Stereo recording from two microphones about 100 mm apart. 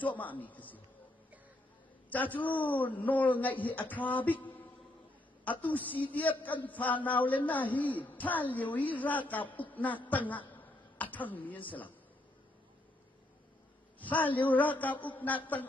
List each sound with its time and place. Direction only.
0.0 s a man's voice: 15° left (ahead or behind)
2.0 s a man's voice: 15° left (ahead or behind)
10.5 s a sound: 15° left (ahead or behind)
13.9 s a man's voice: 15° left (ahead or behind)